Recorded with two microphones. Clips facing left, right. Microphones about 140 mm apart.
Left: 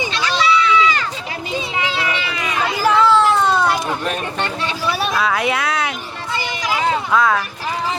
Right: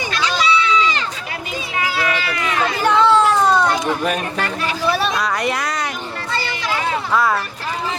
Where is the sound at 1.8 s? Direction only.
25° left (ahead or behind).